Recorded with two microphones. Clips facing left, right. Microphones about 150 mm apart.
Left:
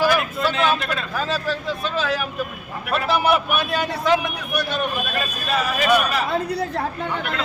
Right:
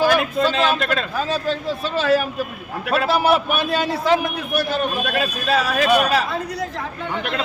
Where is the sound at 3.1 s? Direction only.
35° right (ahead or behind).